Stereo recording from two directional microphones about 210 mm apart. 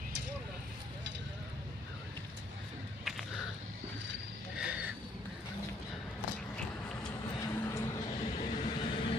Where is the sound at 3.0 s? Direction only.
Centre (ahead or behind).